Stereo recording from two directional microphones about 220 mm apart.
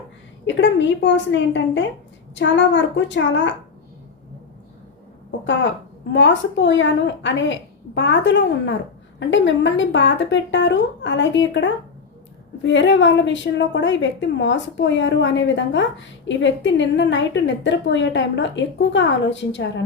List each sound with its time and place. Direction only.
0.4 s a woman's voice: 55° left (ahead or behind)
6.1 s a woman's voice: 55° left (ahead or behind)